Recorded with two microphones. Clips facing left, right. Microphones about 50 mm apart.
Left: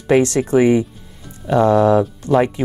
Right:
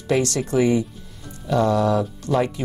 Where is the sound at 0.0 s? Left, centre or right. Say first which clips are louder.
Left 7 dB; left.